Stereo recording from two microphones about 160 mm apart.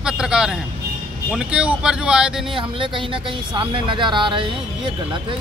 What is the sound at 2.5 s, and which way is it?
Speech, 30° right (ahead or behind).